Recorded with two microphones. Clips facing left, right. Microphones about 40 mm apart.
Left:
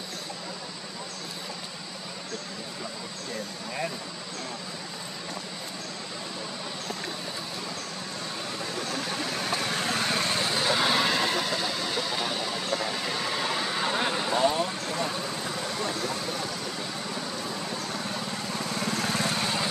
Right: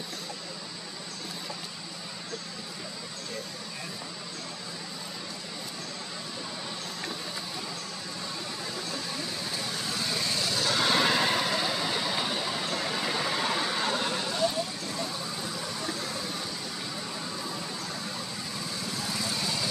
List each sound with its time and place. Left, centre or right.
8.9 s vehicle: left
10.7 s vehicle: centre
13.9 s vehicle: left
18.5 s vehicle: left